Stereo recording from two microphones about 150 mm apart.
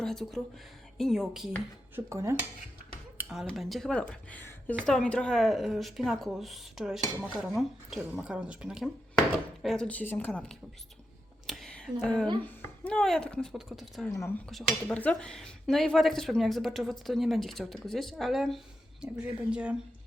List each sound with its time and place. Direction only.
0.0 s speech: centre (ahead or behind)
2.0 s dishes: 20° right (ahead or behind)
3.2 s a sound: 5° right (ahead or behind)
3.4 s speech: centre (ahead or behind)
11.4 s a sound: centre (ahead or behind)
12.6 s speech: 10° left (ahead or behind)
14.1 s speech: 20° left (ahead or behind)
14.5 s speech: 5° left (ahead or behind)